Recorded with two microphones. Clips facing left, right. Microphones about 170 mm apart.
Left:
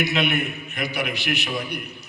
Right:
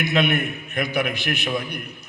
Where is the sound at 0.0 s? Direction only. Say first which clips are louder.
Right 2 dB; 50° right (ahead or behind).